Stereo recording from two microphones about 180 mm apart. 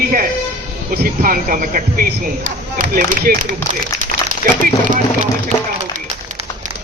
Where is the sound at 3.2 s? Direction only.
50° right (ahead or behind).